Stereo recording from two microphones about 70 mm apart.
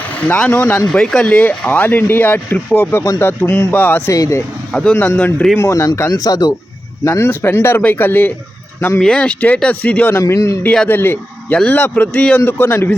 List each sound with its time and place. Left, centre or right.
0.1 s speech: centre; by 3.7 s left
3.7 s speech: left
4.1 s speech: left
4.7 s speech: centre
4.9 s speech: left
5.5 s a man's voice: left
7.0 s speech: left
9.0 s speech: centre
10.1 s speech: left
10.3 s a man's voice: left
10.8 s speech: left
12.1 s speech: centre
12.5 s speech: left